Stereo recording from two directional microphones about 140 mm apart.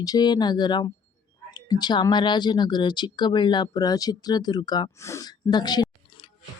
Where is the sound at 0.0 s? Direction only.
30° left (ahead or behind).